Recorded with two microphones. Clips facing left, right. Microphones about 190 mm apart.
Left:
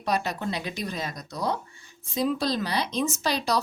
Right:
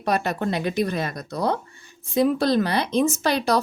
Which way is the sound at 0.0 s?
55° right (ahead or behind).